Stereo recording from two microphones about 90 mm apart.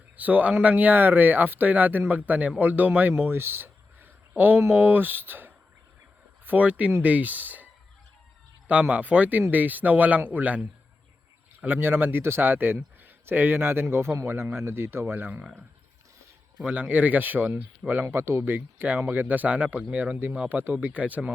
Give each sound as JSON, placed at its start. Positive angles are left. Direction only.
{"t": 0.2, "sound": "speech", "side_deg": -20}
{"t": 16.6, "sound": "speech", "side_deg": -20}